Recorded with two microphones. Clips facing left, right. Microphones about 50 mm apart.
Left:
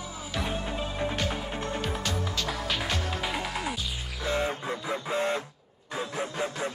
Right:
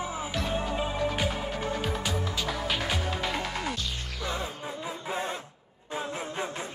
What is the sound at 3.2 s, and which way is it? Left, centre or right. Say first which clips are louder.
Music: even; centre.